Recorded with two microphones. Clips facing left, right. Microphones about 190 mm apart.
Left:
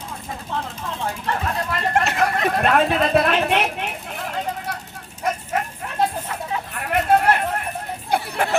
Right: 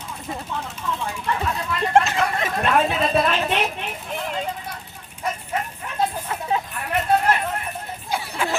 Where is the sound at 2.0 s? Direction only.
60° left (ahead or behind).